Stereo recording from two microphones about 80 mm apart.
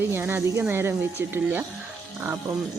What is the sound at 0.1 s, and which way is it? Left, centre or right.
Speech, right.